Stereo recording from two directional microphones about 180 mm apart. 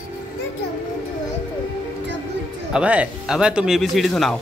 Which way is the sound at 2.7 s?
5° right (ahead or behind).